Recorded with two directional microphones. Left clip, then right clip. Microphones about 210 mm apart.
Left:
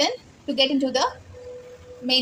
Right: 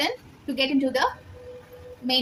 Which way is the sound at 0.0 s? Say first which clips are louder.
Left 3 dB; 20° left (ahead or behind).